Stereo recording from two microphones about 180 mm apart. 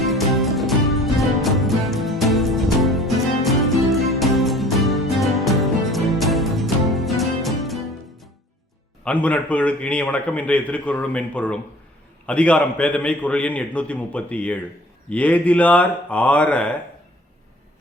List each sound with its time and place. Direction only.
0.0 s music: centre (ahead or behind)
9.0 s a man's voice: 5° left (ahead or behind)